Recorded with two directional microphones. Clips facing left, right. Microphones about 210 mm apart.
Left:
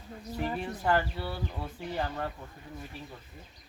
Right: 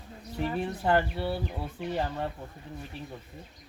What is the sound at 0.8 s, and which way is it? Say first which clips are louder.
Speech: right 2 dB; 25° right (ahead or behind).